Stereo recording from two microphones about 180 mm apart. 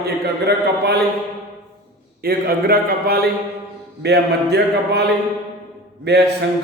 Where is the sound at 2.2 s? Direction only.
55° right (ahead or behind).